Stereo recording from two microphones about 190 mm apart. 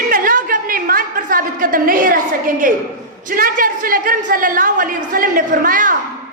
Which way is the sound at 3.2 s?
45° right (ahead or behind).